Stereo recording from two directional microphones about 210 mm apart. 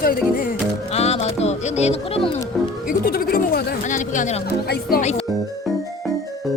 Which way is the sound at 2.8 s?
45° left (ahead or behind).